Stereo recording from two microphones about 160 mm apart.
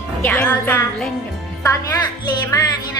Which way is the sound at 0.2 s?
10° left (ahead or behind).